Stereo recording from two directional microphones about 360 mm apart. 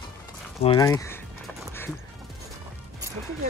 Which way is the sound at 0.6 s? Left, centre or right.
Centre.